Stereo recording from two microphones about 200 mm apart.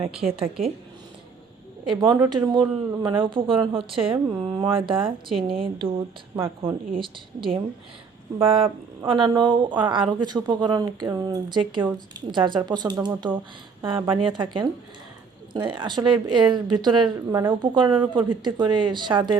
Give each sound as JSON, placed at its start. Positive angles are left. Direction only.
{"t": 0.2, "sound": "a woman's voice", "side_deg": -30}
{"t": 2.0, "sound": "a woman's voice", "side_deg": -15}
{"t": 7.0, "sound": "a woman's voice", "side_deg": -25}